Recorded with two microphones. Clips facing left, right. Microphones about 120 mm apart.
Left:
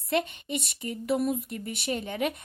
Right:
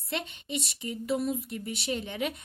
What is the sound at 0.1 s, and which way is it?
A woman's voice, 50° left (ahead or behind).